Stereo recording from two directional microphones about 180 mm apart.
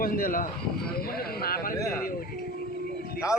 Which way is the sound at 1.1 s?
55° left (ahead or behind).